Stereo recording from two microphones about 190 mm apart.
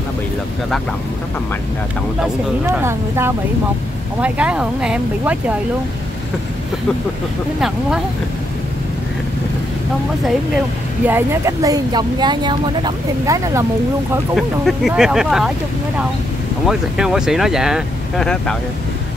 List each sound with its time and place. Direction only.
2.1 s speech: 10° right (ahead or behind)
11.1 s speech: 15° right (ahead or behind)
14.3 s speech: centre (ahead or behind)
16.6 s speech: centre (ahead or behind)